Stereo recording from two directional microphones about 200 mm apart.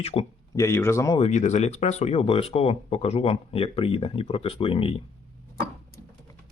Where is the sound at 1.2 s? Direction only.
35° left (ahead or behind).